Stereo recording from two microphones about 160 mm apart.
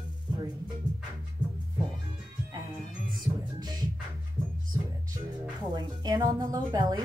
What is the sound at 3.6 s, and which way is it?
Music, 25° right (ahead or behind).